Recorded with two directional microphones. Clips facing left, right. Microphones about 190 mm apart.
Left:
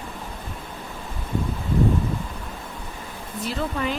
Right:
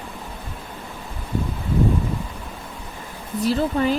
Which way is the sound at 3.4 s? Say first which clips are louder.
Right 7 dB; 35° right (ahead or behind).